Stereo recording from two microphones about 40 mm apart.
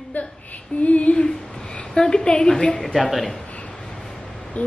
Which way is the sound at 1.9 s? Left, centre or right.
Centre.